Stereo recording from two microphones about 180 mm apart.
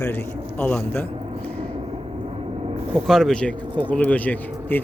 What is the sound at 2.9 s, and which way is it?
Speech, centre (ahead or behind).